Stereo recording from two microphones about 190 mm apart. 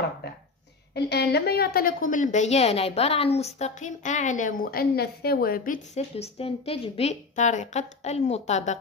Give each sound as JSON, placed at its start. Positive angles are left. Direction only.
{"t": 0.9, "sound": "a woman's voice", "side_deg": 60}
{"t": 5.9, "sound": "a woman's voice", "side_deg": 35}